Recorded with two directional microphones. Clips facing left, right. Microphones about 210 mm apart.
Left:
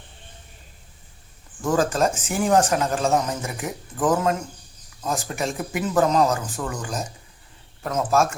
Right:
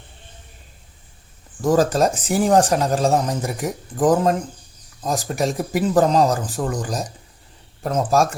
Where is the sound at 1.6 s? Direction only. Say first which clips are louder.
Right 4 dB; 35° right (ahead or behind).